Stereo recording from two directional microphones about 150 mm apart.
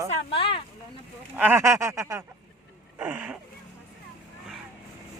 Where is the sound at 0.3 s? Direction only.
35° left (ahead or behind).